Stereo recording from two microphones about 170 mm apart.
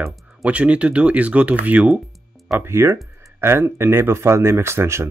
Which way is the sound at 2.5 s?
15° right (ahead or behind).